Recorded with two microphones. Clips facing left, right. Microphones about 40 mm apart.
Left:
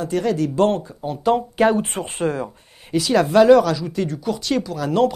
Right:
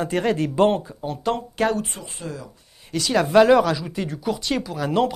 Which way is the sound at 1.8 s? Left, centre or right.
Left.